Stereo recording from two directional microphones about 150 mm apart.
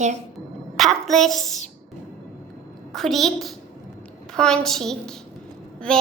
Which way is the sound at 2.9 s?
Centre (ahead or behind).